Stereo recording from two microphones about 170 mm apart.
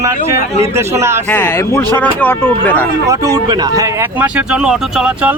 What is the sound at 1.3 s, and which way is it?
Speech, 10° left (ahead or behind).